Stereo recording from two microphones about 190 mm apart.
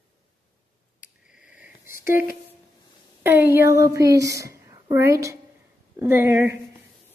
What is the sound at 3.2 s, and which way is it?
A woman's voice, 10° right (ahead or behind).